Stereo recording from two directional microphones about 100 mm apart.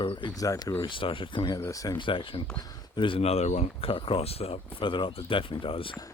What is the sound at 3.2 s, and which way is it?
Speech, 90° left.